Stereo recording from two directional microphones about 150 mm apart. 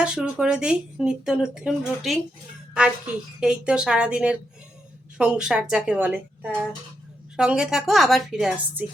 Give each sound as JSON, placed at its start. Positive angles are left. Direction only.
{"t": 0.0, "sound": "speech", "side_deg": -5}
{"t": 3.4, "sound": "speech", "side_deg": -5}